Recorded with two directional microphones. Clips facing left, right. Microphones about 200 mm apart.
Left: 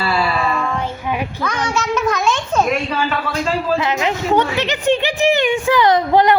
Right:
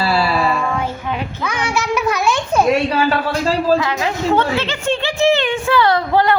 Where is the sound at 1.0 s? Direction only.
10° left (ahead or behind).